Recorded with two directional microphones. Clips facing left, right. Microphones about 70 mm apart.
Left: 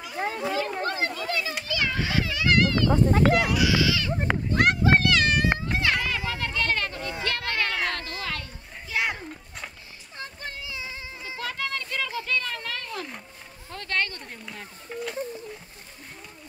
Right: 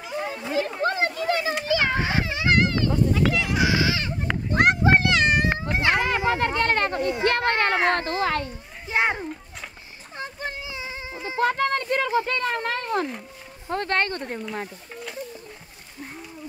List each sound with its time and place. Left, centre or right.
0.8 s chatter: right
1.6 s children playing: right
2.9 s speech: left
3.5 s a sound: right
13.7 s speech: right
14.9 s speech: centre